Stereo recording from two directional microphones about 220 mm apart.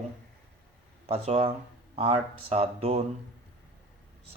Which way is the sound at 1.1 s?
25° right (ahead or behind).